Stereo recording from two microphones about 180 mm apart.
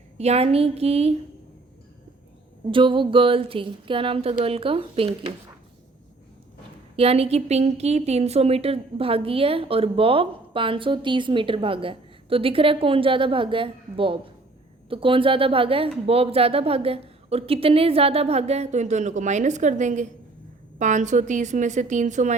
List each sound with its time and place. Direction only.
0.2 s a woman's voice: 35° right (ahead or behind)
2.6 s a sound: 25° right (ahead or behind)
4.4 s a woman's voice: 30° right (ahead or behind)
6.9 s a woman's voice: 35° right (ahead or behind)
14.8 s a sound: 30° right (ahead or behind)
16.0 s a woman's voice: 35° right (ahead or behind)